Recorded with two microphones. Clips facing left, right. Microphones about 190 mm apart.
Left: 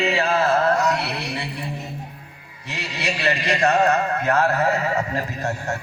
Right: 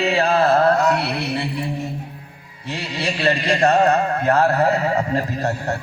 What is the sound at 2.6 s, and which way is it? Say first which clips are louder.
A man's voice: right 3 dB; 30° right (ahead or behind).